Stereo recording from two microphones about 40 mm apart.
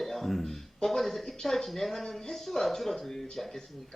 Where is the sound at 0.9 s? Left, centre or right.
Centre.